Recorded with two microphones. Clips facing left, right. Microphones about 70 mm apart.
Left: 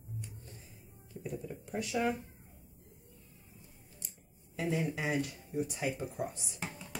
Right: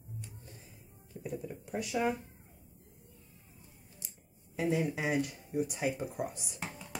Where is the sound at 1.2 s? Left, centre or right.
Centre.